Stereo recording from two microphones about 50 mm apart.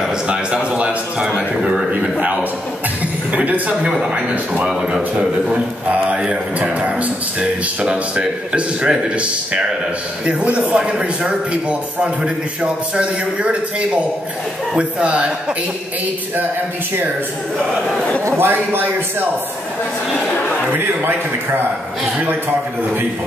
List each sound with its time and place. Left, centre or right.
0.3 s speech: right
3.3 s speech: right
5.1 s speech: right
18.4 s a man's voice: right
20.7 s a man's voice: right